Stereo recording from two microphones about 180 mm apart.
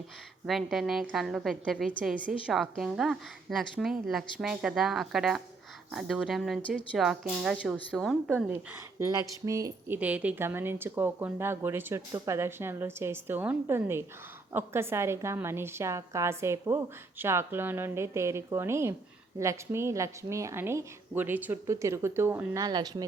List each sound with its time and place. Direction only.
0.4 s a woman's voice: centre (ahead or behind)
8.3 s a woman's voice: 10° right (ahead or behind)
9.0 s a sound: 20° right (ahead or behind)
9.5 s speech: 20° right (ahead or behind)
10.0 s a woman's voice: 10° right (ahead or behind); by 23.0 s 25° right (ahead or behind)